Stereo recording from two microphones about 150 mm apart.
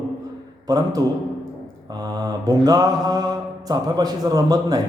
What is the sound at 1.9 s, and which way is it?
A man's voice, 25° right (ahead or behind).